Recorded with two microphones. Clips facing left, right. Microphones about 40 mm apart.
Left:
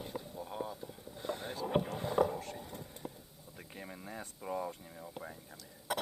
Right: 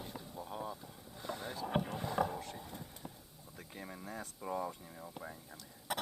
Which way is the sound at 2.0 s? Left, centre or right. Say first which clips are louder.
Left 5 dB; centre.